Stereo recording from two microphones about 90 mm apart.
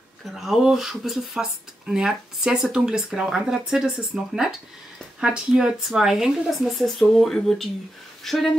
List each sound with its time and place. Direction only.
0.3 s speech: centre (ahead or behind)